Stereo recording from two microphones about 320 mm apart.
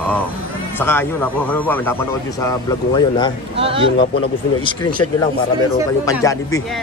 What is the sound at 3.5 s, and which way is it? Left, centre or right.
Speech, centre.